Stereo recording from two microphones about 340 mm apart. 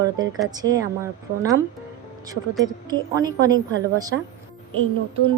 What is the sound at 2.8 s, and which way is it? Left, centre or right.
Speech, centre.